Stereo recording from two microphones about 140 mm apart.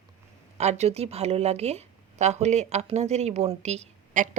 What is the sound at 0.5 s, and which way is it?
Speech, 55° right (ahead or behind).